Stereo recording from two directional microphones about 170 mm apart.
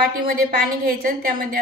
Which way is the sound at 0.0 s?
55° right (ahead or behind).